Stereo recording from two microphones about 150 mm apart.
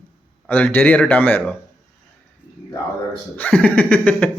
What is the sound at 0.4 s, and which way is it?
Speech, 10° left (ahead or behind).